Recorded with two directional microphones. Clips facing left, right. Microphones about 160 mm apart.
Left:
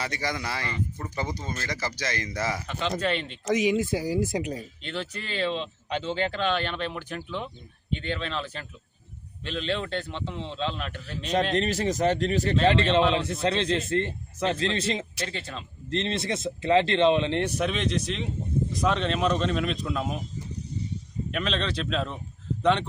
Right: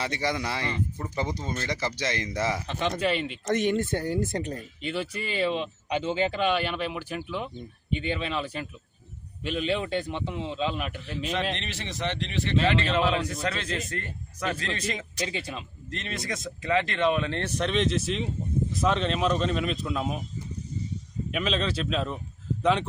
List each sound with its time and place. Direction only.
0.0 s speech: 25° right (ahead or behind)
3.0 s speech: 5° right (ahead or behind)
4.8 s speech: 10° right (ahead or behind)
11.5 s speech: 40° left (ahead or behind)
13.1 s speech: 25° left (ahead or behind)
15.3 s speech: 10° right (ahead or behind)
15.9 s speech: 30° left (ahead or behind); by 20.2 s centre (ahead or behind)
21.2 s speech: 5° right (ahead or behind)